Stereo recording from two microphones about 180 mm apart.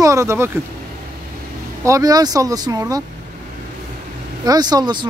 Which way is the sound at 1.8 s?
20° right (ahead or behind).